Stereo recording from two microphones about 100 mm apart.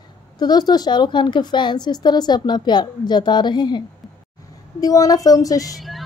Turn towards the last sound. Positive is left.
turn(degrees=0)  # may be behind; listen again after turning